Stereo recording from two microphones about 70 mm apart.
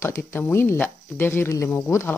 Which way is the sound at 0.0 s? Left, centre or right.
Left.